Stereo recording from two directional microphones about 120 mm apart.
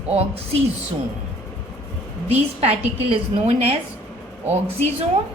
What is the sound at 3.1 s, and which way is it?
Speech, 55° right (ahead or behind).